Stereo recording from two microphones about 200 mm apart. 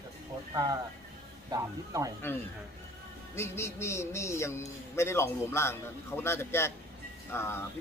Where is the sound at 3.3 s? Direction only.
15° left (ahead or behind).